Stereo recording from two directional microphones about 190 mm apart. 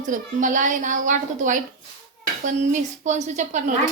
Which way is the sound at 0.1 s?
40° right (ahead or behind).